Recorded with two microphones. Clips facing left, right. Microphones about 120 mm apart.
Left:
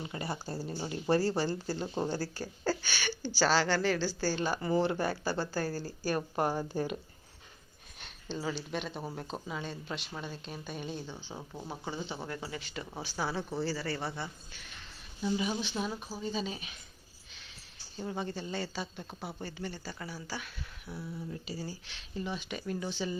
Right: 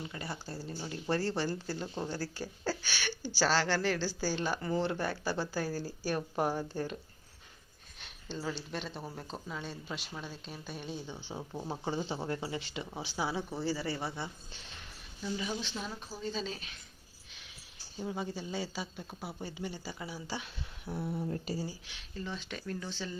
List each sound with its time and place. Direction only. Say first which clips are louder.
0.0 s speech: left 3 dB; 25° left (ahead or behind); by 6.7 s centre (ahead or behind)
6.7 s speech: left 3 dB; 10° left (ahead or behind)
7.9 s speech: left 2 dB; centre (ahead or behind)
12.3 s speech: right 3 dB; 25° right (ahead or behind)
15.2 s speech: left 4 dB; 15° left (ahead or behind)
17.9 s speech: left 1 dB; 5° right (ahead or behind); by 20.9 s 20° right (ahead or behind)
20.9 s speech: right 5 dB; 55° right (ahead or behind)
21.7 s speech: left 2 dB; 5° right (ahead or behind)
22.1 s speech: left 3 dB; 15° left (ahead or behind)